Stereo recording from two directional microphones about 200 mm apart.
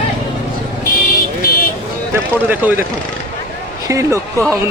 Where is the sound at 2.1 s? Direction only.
10° right (ahead or behind).